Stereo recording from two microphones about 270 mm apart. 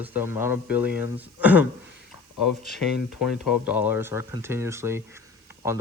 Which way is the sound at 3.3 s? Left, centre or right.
Centre.